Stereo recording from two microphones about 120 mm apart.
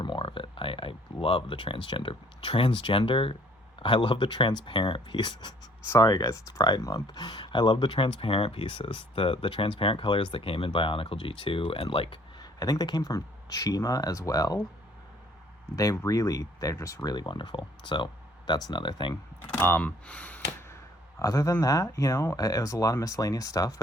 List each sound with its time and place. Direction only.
0.0 s a sound: 40° left (ahead or behind)
3.8 s speech: 45° left (ahead or behind)
12.4 s speech: 30° left (ahead or behind)
15.7 s speech: 30° left (ahead or behind)
19.1 s speech: 20° left (ahead or behind)
21.2 s speech: 30° left (ahead or behind)